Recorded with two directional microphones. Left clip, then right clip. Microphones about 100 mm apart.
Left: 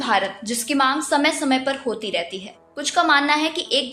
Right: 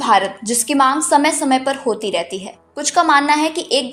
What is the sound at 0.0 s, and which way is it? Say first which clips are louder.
A woman's voice: right 6 dB; 40° right (ahead or behind).